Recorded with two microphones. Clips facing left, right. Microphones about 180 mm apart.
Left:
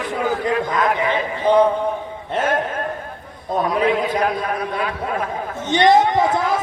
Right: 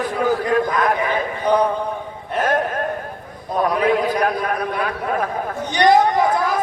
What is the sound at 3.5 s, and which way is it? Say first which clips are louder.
Speech: even; 25° left (ahead or behind).